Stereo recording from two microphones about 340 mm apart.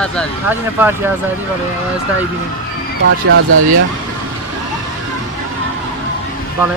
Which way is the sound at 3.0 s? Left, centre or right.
Right.